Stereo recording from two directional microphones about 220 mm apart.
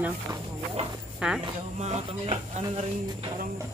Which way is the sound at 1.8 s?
30° right (ahead or behind).